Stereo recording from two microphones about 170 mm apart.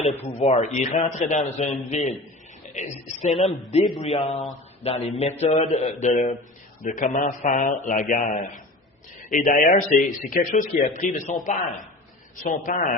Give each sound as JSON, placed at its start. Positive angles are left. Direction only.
{"t": 0.0, "sound": "a man's voice", "side_deg": 40}
{"t": 3.8, "sound": "speech", "side_deg": 25}
{"t": 4.1, "sound": "a man's voice", "side_deg": 40}